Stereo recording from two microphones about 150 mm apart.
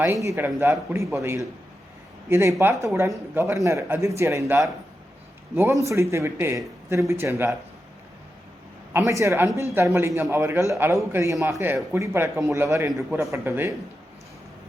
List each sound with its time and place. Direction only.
0.0 s a man's voice: 20° right (ahead or behind)
8.9 s a man's voice: 20° right (ahead or behind)